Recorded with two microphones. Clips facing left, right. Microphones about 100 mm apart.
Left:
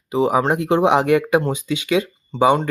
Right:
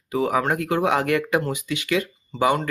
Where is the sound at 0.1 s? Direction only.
20° left (ahead or behind).